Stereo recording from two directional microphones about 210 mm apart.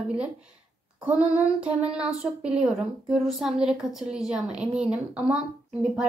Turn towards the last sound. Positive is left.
turn(degrees=-5)  # may be behind; listen again after turning